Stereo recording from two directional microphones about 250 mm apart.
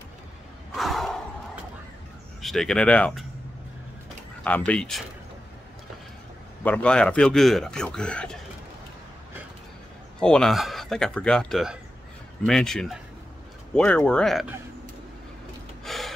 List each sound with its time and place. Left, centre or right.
0.7 s battle cry: centre
2.4 s speech: centre
4.5 s speech: centre
6.6 s speech: centre
10.2 s speech: centre
15.8 s gasp: centre